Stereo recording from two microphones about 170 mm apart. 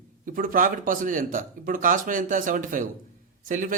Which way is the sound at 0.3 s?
55° right (ahead or behind).